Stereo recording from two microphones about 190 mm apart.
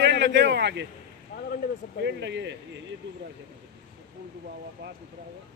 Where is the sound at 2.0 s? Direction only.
65° right (ahead or behind).